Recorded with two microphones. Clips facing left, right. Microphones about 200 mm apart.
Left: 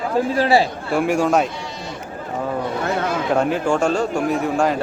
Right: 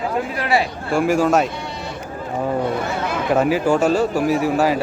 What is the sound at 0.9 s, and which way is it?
Speech, centre (ahead or behind).